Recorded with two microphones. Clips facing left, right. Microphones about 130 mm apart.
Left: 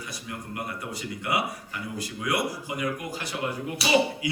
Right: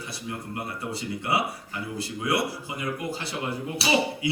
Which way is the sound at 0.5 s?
30° right (ahead or behind).